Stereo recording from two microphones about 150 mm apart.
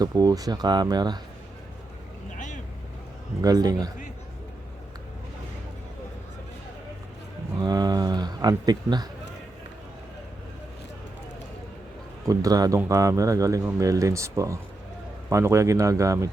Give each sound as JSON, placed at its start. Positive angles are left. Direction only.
{"t": 0.0, "sound": "speech", "side_deg": -25}
{"t": 2.3, "sound": "vehicle", "side_deg": 55}
{"t": 3.4, "sound": "speech", "side_deg": -25}
{"t": 7.6, "sound": "speech", "side_deg": -25}
{"t": 12.3, "sound": "speech", "side_deg": -25}